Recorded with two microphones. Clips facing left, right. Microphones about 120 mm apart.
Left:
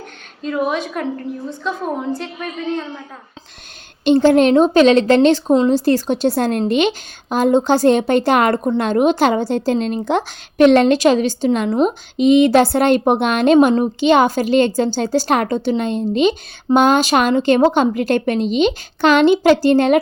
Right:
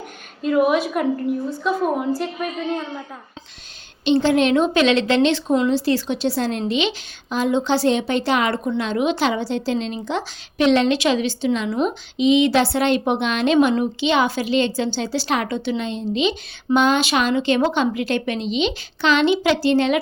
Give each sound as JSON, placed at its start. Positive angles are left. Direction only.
{"t": 0.4, "sound": "a woman's voice", "side_deg": -5}
{"t": 4.0, "sound": "a woman's voice", "side_deg": 45}